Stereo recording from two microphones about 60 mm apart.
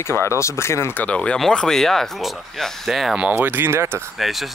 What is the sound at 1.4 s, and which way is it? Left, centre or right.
Speech, centre.